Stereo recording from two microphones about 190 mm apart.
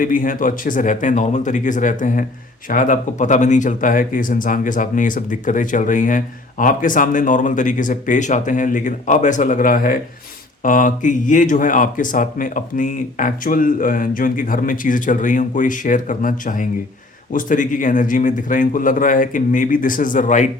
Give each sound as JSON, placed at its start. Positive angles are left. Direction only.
{"t": 0.0, "sound": "speech", "side_deg": 45}